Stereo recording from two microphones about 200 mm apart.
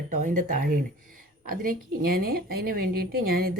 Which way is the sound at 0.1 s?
40° right (ahead or behind).